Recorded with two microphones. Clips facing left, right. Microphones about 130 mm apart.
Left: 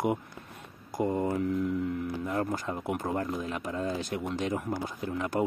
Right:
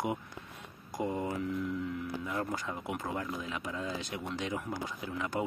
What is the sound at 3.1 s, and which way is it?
Speech, 45° left (ahead or behind).